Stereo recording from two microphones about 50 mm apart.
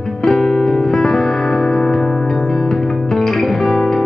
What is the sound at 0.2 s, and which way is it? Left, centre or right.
Music, centre.